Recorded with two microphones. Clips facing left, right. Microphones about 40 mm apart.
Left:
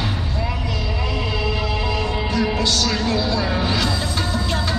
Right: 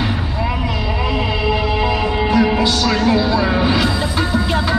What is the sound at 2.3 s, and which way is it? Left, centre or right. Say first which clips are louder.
Music: right 7 dB; centre.